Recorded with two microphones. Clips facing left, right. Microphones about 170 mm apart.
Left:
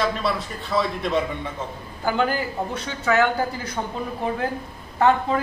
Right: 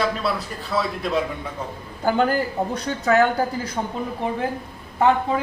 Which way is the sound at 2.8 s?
40° right (ahead or behind).